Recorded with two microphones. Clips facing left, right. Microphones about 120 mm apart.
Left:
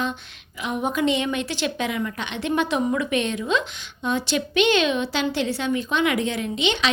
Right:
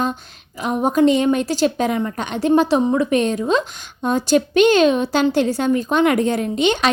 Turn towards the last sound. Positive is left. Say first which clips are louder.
# right 6 dB
turn(degrees=-45)  # may be behind; listen again after turning